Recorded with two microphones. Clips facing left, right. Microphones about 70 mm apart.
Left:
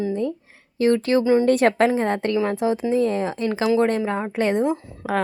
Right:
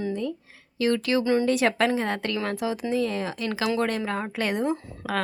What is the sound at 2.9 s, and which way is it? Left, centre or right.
Speech, left.